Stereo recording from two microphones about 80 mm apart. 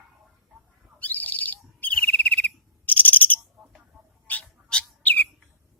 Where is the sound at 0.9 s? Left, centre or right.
Left.